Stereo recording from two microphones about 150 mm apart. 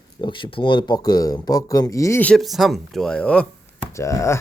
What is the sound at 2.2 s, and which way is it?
Speech, centre (ahead or behind).